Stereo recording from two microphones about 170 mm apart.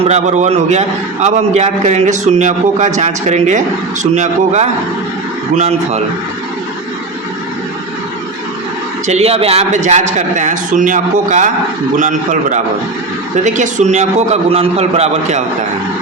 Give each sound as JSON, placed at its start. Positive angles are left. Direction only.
{"t": 0.1, "sound": "a man's voice", "side_deg": -45}
{"t": 9.0, "sound": "a man's voice", "side_deg": -40}